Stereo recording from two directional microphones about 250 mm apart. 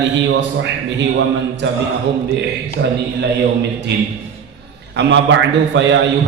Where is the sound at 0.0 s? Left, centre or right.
Right.